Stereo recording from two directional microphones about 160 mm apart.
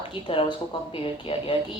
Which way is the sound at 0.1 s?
35° left (ahead or behind).